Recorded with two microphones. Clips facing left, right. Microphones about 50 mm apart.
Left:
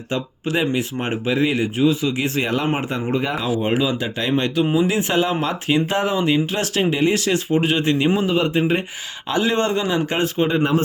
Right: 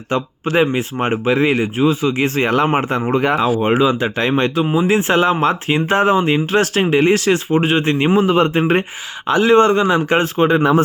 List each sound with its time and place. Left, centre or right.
0.1 s speech: right
3.6 s speech: right
4.6 s speech: right
4.9 s speech: right
9.2 s speech: right